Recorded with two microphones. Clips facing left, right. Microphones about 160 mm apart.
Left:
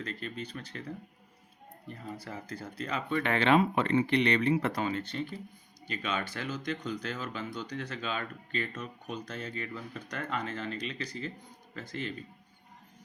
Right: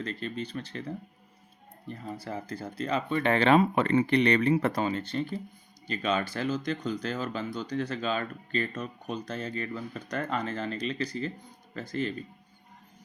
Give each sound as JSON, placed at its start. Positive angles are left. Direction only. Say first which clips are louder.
{"t": 0.0, "sound": "speech", "louder": "right 4 dB", "side_deg": -30}
{"t": 2.1, "sound": "speech", "louder": "right 5 dB", "side_deg": -30}